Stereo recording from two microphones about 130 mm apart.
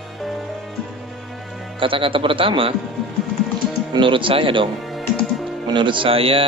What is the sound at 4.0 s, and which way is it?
Speech, 40° right (ahead or behind).